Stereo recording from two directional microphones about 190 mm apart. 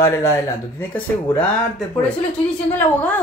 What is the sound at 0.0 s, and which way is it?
A woman's voice, 15° left (ahead or behind).